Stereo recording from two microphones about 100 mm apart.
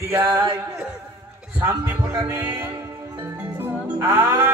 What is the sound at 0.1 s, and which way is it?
Speech, 25° right (ahead or behind).